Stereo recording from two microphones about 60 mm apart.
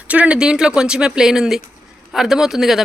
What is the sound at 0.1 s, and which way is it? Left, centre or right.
A man's voice, right.